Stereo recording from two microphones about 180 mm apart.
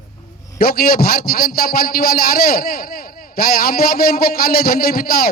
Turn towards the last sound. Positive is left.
turn(degrees=55)  # may be behind; listen again after turning